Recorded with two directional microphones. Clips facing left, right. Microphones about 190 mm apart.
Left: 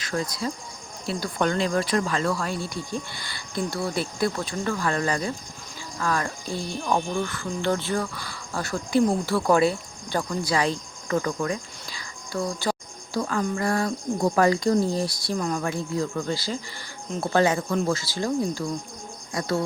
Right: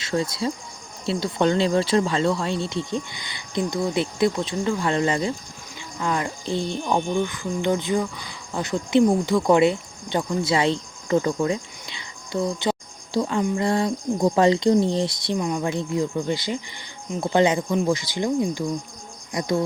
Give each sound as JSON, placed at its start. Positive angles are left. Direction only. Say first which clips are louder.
{"t": 0.0, "sound": "speech", "louder": "right 4 dB", "side_deg": -25}
{"t": 15.4, "sound": "speech", "louder": "right 2 dB", "side_deg": -10}
{"t": 15.6, "sound": "speech", "louder": "right 3 dB", "side_deg": -20}